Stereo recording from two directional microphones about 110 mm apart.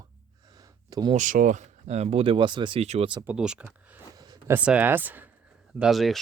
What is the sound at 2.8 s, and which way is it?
Speech, 80° right.